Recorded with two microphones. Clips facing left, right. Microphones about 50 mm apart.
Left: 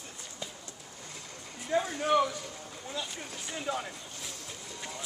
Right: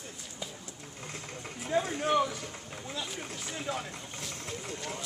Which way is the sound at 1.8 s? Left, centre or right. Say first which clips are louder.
Right 1 dB; right.